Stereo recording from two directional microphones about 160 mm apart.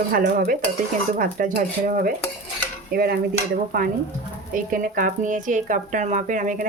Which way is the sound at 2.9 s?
75° right (ahead or behind).